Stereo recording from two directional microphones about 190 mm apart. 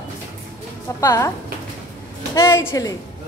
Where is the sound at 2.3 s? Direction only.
15° left (ahead or behind).